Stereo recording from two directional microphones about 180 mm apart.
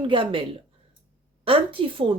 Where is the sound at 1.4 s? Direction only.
30° right (ahead or behind).